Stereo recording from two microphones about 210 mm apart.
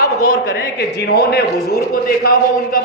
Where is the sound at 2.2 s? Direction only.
45° left (ahead or behind).